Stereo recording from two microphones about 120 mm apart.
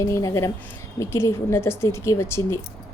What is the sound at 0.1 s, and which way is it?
Speech, 25° left (ahead or behind).